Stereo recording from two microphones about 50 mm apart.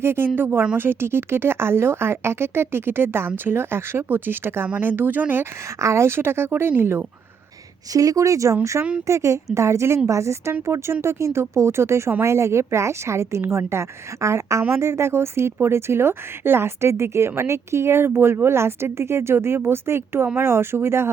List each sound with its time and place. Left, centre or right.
0.0 s speech: right
5.6 s speech: right
8.0 s a woman's voice: right
9.6 s a woman's voice: right
10.1 s a woman's voice: right
10.7 s a woman's voice: right
14.7 s speech: right